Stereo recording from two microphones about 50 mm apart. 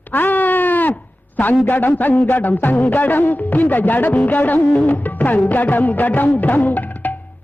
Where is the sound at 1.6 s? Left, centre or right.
Left.